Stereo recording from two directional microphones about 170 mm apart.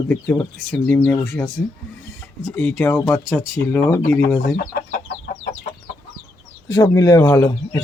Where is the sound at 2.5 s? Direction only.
10° left (ahead or behind).